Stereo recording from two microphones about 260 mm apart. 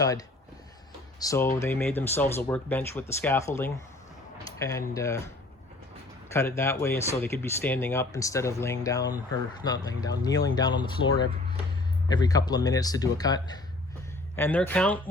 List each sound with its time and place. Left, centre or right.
0.0 s speech: centre
6.6 s speech: centre